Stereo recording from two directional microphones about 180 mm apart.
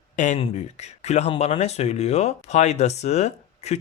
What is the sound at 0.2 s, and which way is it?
Speech, 40° left (ahead or behind).